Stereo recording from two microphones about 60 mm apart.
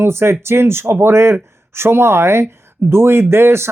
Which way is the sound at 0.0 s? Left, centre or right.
Right.